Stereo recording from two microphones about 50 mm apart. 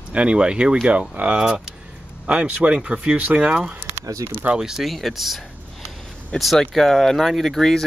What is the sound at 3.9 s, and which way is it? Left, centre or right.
Speech, right.